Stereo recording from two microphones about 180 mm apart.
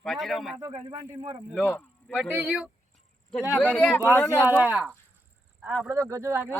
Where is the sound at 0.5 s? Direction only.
25° right (ahead or behind).